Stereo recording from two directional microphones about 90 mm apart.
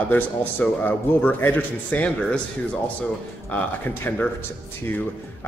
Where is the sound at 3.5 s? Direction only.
20° left (ahead or behind).